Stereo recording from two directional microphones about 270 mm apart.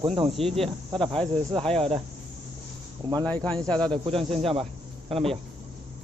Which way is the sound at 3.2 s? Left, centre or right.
Centre.